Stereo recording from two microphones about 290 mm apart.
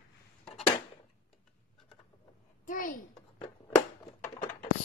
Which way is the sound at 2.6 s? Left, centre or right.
Left.